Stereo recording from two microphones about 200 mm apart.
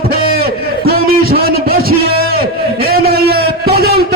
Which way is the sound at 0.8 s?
50° right (ahead or behind).